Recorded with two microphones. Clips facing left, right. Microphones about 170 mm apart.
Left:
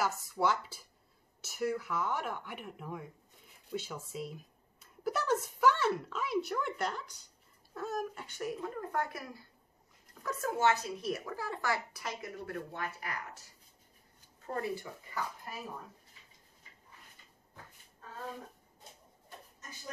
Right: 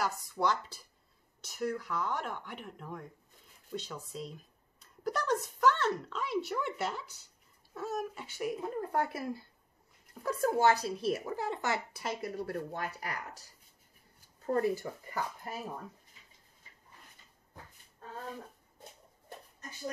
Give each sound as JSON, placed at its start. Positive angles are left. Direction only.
{"t": 0.0, "sound": "speech", "side_deg": 5}
{"t": 8.5, "sound": "speech", "side_deg": -30}
{"t": 14.4, "sound": "speech", "side_deg": -40}